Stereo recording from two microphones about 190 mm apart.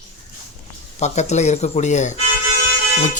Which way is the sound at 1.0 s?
35° left (ahead or behind).